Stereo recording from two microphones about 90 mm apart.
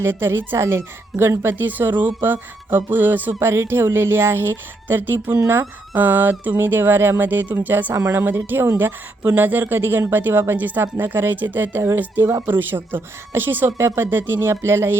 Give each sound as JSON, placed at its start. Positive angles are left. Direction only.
{"t": 0.0, "sound": "speech", "side_deg": -25}